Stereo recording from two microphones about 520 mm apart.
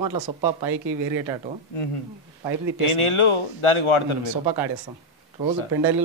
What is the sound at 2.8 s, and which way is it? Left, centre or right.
A man's voice, left.